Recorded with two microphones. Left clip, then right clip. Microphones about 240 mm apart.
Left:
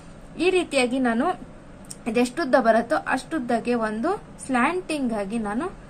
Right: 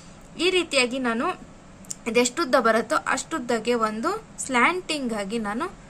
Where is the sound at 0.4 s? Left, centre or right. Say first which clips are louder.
Even; centre.